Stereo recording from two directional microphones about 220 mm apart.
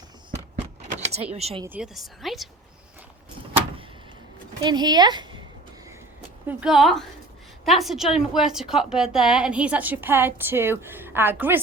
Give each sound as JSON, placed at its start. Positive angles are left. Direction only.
{"t": 0.9, "sound": "speech", "side_deg": -30}
{"t": 1.6, "sound": "a woman's voice", "side_deg": -5}
{"t": 4.6, "sound": "speech", "side_deg": -20}
{"t": 6.5, "sound": "a woman's voice", "side_deg": -5}